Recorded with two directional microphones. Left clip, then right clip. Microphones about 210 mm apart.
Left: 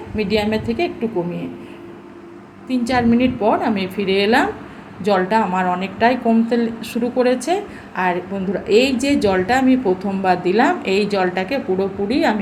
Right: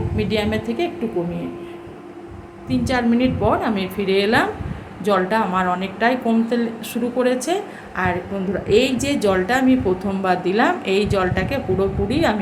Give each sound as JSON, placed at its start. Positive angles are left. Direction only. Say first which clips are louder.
{"t": 0.2, "sound": "a woman's voice", "louder": "left 3 dB", "side_deg": 5}
{"t": 2.6, "sound": "a woman's voice", "louder": "left 2 dB", "side_deg": 5}